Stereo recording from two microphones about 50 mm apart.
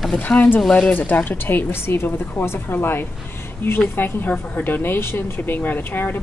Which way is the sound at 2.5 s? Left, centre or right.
Left.